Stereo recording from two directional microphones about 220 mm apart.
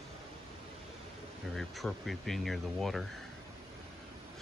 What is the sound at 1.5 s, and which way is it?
Speech, centre (ahead or behind).